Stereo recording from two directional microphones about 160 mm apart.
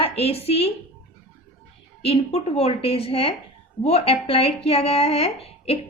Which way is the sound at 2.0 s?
35° left (ahead or behind).